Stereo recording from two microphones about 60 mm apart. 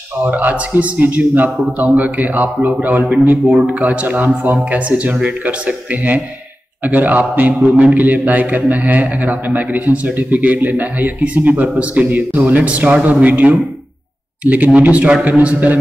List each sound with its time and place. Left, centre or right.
0.2 s a man's voice: right